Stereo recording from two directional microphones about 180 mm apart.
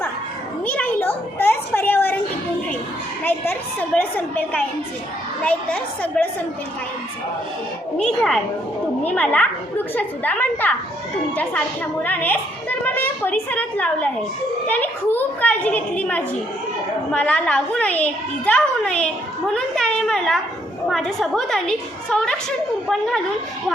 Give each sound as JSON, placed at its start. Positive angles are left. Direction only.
{"t": 0.6, "sound": "a sound", "side_deg": 10}
{"t": 3.2, "sound": "a woman's voice", "side_deg": 10}
{"t": 5.4, "sound": "a woman's voice", "side_deg": 5}
{"t": 9.0, "sound": "a woman's voice", "side_deg": 10}